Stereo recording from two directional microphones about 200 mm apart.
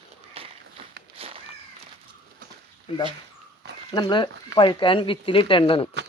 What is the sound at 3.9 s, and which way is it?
Speech, 20° left (ahead or behind).